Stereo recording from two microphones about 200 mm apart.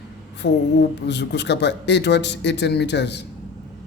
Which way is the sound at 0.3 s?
60° left (ahead or behind).